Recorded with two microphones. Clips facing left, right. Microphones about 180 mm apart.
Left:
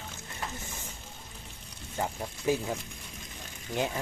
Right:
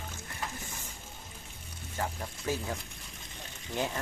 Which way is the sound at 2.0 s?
15° left (ahead or behind).